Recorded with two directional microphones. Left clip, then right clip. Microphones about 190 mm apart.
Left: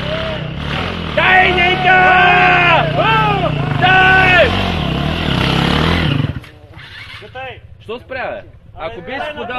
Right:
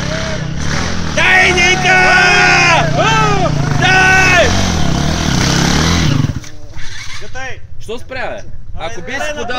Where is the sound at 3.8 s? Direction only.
20° left (ahead or behind).